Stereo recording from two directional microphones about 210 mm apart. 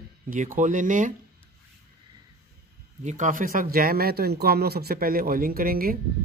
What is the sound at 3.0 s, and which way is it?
A man's voice, 35° right (ahead or behind).